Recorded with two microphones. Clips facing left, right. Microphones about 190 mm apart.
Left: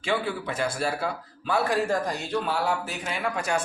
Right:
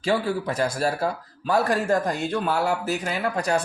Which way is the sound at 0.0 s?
40° right (ahead or behind).